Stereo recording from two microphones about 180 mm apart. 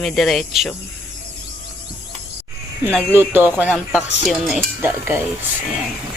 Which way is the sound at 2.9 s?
5° left (ahead or behind).